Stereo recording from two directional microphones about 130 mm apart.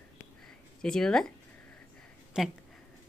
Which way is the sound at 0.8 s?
5° left (ahead or behind).